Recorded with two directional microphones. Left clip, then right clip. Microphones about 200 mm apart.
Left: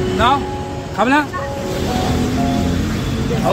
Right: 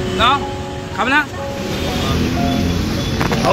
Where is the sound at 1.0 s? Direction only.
45° left (ahead or behind).